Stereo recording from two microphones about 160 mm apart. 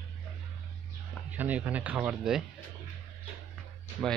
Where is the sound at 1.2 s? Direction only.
10° right (ahead or behind).